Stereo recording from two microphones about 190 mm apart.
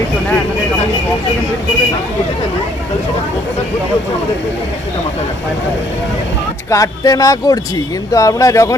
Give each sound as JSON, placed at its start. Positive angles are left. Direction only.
{"t": 6.7, "sound": "speech", "side_deg": 15}